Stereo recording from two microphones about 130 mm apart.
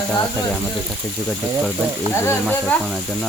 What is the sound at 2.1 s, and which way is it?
Speech, 20° left (ahead or behind).